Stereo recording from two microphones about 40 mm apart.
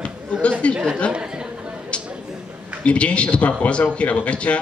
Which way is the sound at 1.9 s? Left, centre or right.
Left.